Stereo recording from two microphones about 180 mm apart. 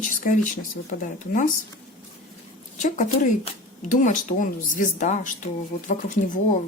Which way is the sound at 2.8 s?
45° left (ahead or behind).